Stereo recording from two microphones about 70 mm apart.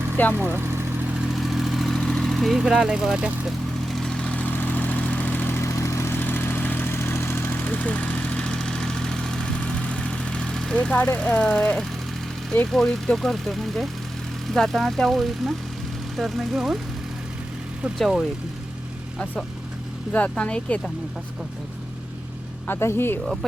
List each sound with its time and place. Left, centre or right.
0.3 s speech: right
1.3 s vehicle: centre
2.6 s speech: centre
3.8 s vehicle: centre
4.3 s vehicle: left
5.5 s vehicle: left
6.9 s vehicle: left; by 11.9 s centre
12.7 s speech: centre
20.1 s speech: centre
22.6 s speech: left
23.2 s speech: centre